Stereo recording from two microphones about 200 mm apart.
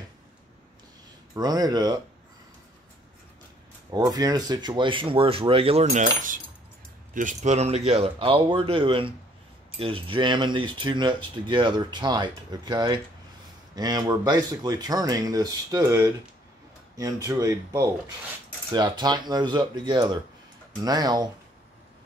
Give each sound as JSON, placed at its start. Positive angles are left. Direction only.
{"t": 1.3, "sound": "speech", "side_deg": -20}
{"t": 3.9, "sound": "speech", "side_deg": -20}